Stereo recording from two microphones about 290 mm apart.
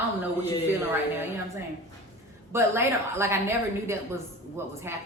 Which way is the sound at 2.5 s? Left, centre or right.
Centre.